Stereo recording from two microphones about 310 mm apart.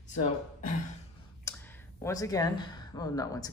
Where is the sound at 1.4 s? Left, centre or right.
Centre.